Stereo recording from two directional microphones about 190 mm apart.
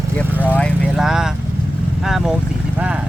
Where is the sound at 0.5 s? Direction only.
Centre (ahead or behind).